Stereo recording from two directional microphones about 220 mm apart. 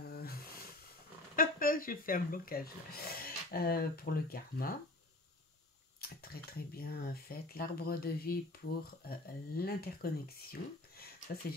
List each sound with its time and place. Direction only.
0.0 s a sound: 45° left (ahead or behind)
1.3 s speech: 40° left (ahead or behind)
5.9 s speech: 45° left (ahead or behind)